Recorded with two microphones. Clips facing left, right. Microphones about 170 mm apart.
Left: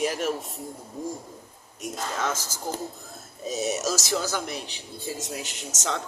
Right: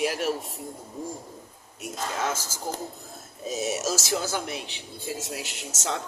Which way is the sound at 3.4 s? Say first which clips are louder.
Left 1 dB; 5° right (ahead or behind).